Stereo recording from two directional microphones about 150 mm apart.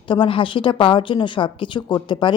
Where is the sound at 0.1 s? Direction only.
35° left (ahead or behind).